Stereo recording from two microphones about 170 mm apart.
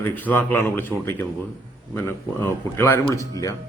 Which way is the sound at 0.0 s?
10° left (ahead or behind).